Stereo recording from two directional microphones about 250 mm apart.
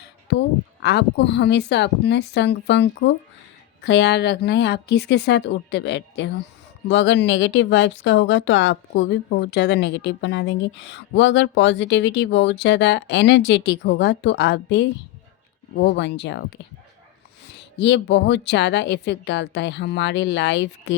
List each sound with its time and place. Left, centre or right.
0.3 s a woman's voice: left
17.5 s speech: left